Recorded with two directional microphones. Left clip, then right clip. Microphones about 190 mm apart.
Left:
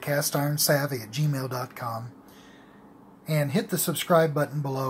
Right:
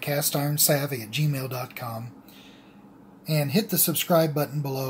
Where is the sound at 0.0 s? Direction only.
5° left (ahead or behind).